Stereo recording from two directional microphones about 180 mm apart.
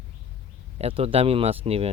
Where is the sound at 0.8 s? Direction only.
35° right (ahead or behind).